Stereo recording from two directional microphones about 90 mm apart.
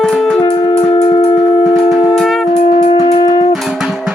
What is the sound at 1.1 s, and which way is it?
Music, 90° left.